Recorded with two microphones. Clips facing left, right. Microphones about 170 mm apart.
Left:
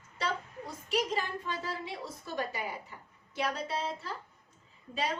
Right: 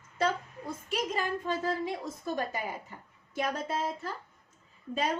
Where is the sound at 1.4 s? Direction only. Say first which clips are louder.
Right 6 dB; 45° right (ahead or behind).